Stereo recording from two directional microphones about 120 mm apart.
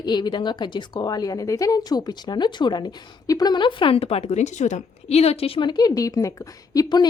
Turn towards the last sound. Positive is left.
turn(degrees=35)  # may be behind; listen again after turning